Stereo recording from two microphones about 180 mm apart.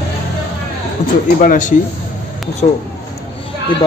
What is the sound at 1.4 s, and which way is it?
Speech, 50° left (ahead or behind).